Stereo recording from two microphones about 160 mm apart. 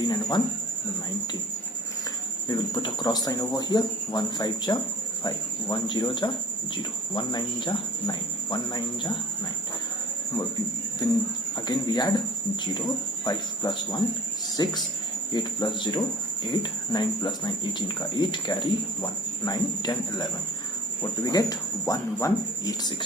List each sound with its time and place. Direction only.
0.0 s speech: 25° left (ahead or behind)
2.5 s speech: 25° left (ahead or behind)
11.7 s speech: 25° left (ahead or behind)
13.2 s speech: 25° left (ahead or behind)